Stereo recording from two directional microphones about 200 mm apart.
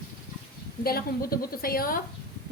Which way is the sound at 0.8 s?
50° left (ahead or behind).